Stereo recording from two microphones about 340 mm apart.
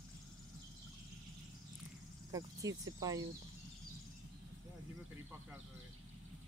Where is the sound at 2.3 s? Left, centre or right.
Centre.